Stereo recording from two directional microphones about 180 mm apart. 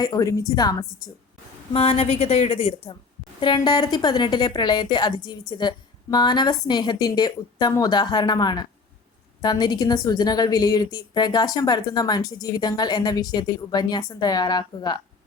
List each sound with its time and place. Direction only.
0.0 s a woman's voice: 20° left (ahead or behind)
1.7 s a woman's voice: 30° left (ahead or behind)